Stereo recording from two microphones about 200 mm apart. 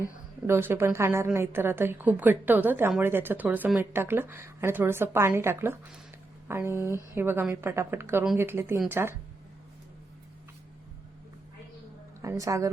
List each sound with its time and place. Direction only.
0.4 s a woman's voice: 10° right (ahead or behind)
12.2 s a woman's voice: 15° right (ahead or behind)